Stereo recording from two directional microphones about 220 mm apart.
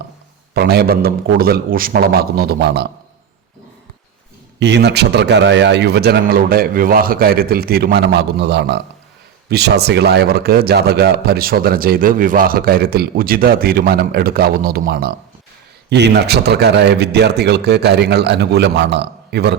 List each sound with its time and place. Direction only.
0.5 s speech: 45° right (ahead or behind)
4.6 s speech: 50° right (ahead or behind)